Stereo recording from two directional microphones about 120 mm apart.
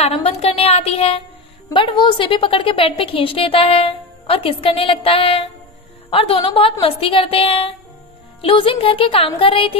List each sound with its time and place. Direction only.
0.0 s music: 55° left (ahead or behind)
1.7 s a woman's voice: 40° left (ahead or behind)